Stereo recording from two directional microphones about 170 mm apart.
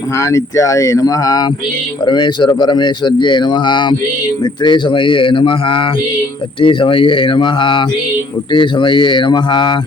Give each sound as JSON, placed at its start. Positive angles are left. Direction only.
{"t": 0.2, "sound": "speech", "side_deg": 20}